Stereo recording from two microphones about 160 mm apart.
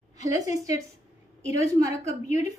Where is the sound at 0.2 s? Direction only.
20° right (ahead or behind).